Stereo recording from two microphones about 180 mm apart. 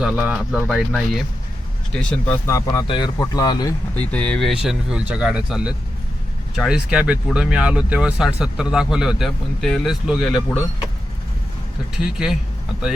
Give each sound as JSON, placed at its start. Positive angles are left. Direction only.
{"t": 0.0, "sound": "speech", "side_deg": -5}
{"t": 3.9, "sound": "speech", "side_deg": 10}
{"t": 12.0, "sound": "speech", "side_deg": -5}